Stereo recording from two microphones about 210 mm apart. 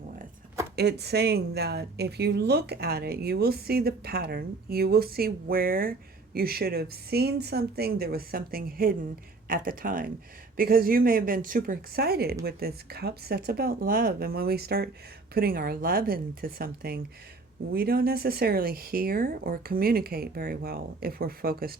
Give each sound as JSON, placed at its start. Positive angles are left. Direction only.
{"t": 0.8, "sound": "a woman's voice", "side_deg": -50}